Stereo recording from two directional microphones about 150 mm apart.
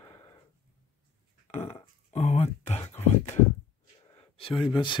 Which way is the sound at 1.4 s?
45° left (ahead or behind).